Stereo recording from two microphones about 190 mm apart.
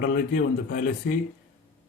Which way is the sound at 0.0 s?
45° left (ahead or behind).